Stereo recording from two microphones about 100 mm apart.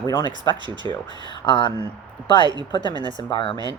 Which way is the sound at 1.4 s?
50° left (ahead or behind).